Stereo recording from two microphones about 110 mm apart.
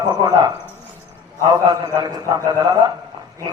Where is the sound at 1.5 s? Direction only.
35° right (ahead or behind).